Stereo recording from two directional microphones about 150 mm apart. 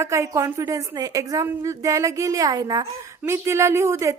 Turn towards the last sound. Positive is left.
turn(degrees=-20)  # may be behind; listen again after turning